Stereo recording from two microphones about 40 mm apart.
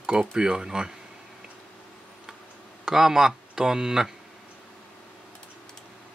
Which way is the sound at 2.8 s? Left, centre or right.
Centre.